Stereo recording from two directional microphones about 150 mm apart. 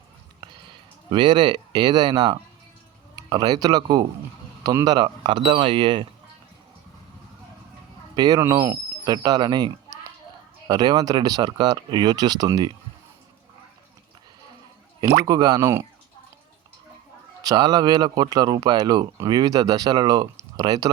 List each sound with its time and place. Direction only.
1.1 s speech: 30° right (ahead or behind)
8.1 s speech: 25° right (ahead or behind)
15.3 s speech: 25° right (ahead or behind)
17.4 s speech: 30° right (ahead or behind)